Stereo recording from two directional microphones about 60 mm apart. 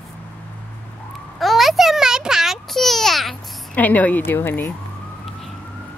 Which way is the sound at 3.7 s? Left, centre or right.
Left.